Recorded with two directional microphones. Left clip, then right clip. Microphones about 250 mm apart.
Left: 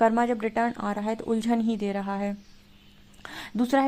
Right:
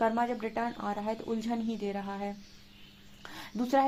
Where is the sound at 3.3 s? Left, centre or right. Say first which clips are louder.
Left 3 dB; left.